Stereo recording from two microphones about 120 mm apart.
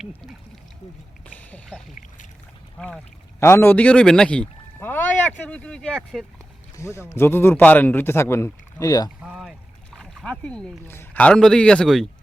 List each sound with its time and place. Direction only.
1.4 s duck: 15° left (ahead or behind)
2.7 s speech: 5° left (ahead or behind)
3.4 s speech: 20° left (ahead or behind)
6.7 s a man's voice: 25° left (ahead or behind)
9.2 s a sound: 5° right (ahead or behind)
10.8 s a man's voice: 20° left (ahead or behind)